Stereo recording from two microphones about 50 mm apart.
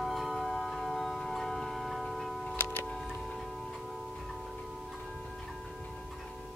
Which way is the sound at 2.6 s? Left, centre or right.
Left.